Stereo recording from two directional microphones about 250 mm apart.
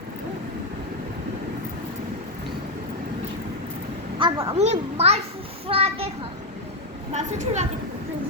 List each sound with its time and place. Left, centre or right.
4.2 s a child's voice: centre
7.1 s a child's voice: right